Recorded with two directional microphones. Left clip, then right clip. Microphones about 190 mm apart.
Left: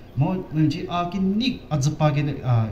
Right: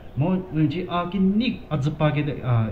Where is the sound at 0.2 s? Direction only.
20° right (ahead or behind).